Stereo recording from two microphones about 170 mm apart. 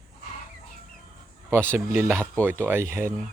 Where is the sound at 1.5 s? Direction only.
15° right (ahead or behind).